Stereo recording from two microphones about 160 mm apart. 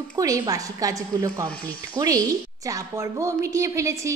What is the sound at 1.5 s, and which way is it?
Speech, 10° left (ahead or behind).